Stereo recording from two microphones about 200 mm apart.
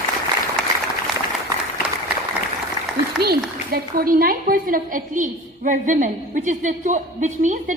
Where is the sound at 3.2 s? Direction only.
50° right (ahead or behind).